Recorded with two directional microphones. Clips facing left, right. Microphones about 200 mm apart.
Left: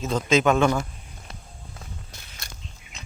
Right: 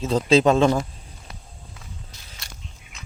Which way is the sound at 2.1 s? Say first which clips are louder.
Left 3 dB; 55° left (ahead or behind).